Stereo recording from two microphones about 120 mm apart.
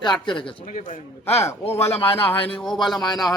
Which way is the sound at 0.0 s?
40° left (ahead or behind).